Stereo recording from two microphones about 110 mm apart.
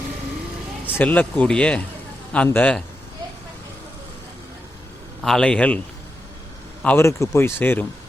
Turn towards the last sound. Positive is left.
turn(degrees=20)  # may be behind; listen again after turning